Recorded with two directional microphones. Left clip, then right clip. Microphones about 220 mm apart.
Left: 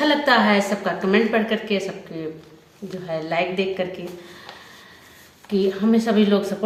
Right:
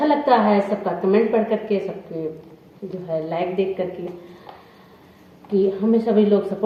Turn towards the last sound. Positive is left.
turn(degrees=20)  # may be behind; listen again after turning